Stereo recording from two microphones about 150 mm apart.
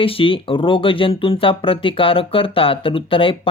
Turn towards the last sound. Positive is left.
turn(degrees=35)  # may be behind; listen again after turning